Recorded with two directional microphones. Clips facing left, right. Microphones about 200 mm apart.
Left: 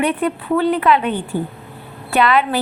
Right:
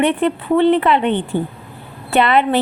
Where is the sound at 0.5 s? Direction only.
25° right (ahead or behind).